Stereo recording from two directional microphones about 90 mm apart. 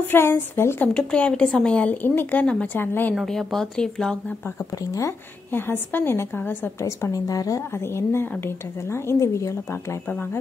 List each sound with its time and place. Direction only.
0.1 s a woman's voice: 25° left (ahead or behind)
0.9 s a woman's voice: 10° left (ahead or behind)
3.3 s speech: 5° left (ahead or behind)
4.9 s a woman's voice: 30° left (ahead or behind)
6.8 s speech: 35° left (ahead or behind)